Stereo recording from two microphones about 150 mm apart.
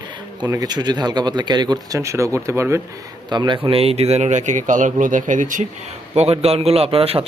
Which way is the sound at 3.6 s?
40° right (ahead or behind).